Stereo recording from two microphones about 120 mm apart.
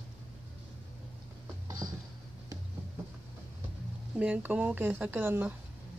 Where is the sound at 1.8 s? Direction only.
35° right (ahead or behind).